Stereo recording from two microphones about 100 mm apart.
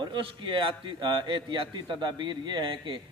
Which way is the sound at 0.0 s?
55° right (ahead or behind).